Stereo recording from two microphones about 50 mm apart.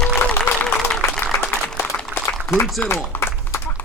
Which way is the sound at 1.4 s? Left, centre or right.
Left.